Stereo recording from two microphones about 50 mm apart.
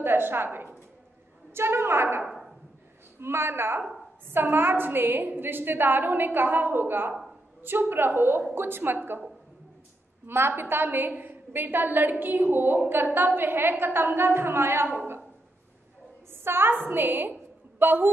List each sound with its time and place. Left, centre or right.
0.0 s a woman's voice: right
1.5 s a woman's voice: right
2.2 s a sound: centre
3.2 s a woman's voice: right
10.2 s a woman's voice: right
16.4 s a woman's voice: right